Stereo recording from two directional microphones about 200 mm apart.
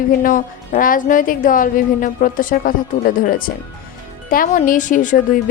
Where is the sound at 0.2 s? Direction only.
40° left (ahead or behind).